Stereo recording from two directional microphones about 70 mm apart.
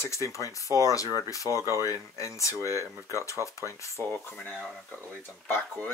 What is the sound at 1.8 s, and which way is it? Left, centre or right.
Speech, left.